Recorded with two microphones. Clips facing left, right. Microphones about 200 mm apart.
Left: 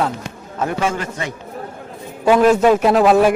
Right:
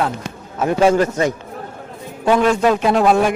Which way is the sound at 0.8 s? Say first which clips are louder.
Right 8 dB; 40° right (ahead or behind).